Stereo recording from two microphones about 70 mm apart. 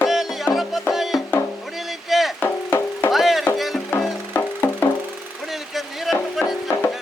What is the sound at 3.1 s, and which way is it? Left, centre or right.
Music, centre.